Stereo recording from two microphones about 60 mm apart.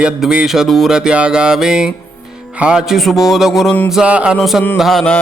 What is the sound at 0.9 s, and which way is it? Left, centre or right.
Mantra, centre.